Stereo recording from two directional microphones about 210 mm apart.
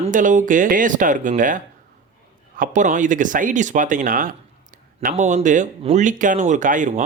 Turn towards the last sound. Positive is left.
turn(degrees=-35)  # may be behind; listen again after turning